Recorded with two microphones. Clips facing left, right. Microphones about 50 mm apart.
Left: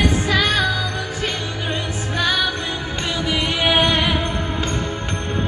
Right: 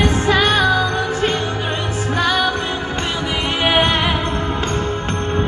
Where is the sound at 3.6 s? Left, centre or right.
Right.